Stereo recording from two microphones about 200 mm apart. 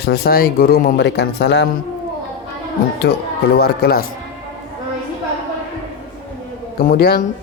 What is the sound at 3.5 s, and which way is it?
Speech, 50° left (ahead or behind).